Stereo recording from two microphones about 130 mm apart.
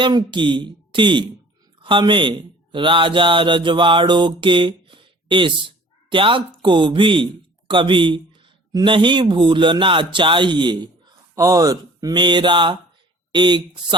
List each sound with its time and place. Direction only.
0.0 s speech: 35° right (ahead or behind)
2.7 s mantra: 40° right (ahead or behind)
6.6 s speech: 35° right (ahead or behind)